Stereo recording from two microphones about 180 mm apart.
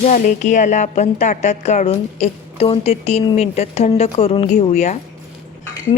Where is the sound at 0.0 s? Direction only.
45° left (ahead or behind).